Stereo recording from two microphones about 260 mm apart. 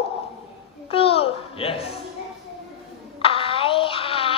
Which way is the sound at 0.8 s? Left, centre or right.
Left.